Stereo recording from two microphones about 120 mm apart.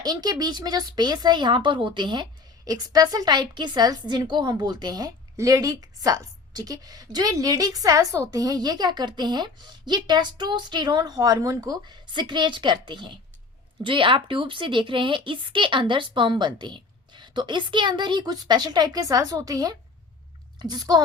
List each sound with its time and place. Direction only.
0.0 s a woman's voice: 35° right (ahead or behind)